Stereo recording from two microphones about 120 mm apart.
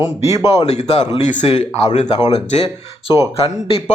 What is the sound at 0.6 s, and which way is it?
A man's voice, 65° left (ahead or behind).